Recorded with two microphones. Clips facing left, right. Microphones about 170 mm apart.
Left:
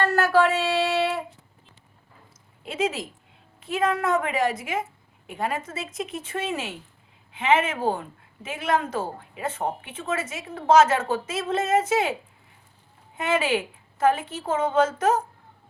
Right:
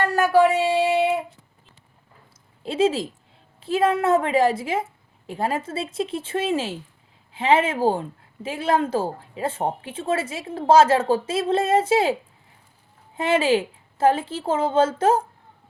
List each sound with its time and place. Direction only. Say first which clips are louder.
0.0 s a sound: right 3 dB; 15° right (ahead or behind)
2.6 s speech: right 6 dB; 30° right (ahead or behind)
13.1 s a woman's voice: right 4 dB; 30° right (ahead or behind)